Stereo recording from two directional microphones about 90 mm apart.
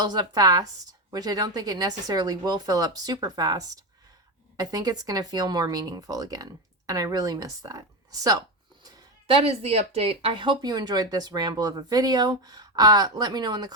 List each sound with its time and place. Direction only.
0.0 s speech: 50° right (ahead or behind)
9.2 s speech: 90° right; by 13.7 s 50° right (ahead or behind)